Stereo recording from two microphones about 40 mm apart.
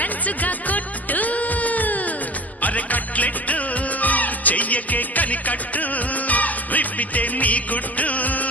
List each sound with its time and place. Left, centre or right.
0.0 s music: left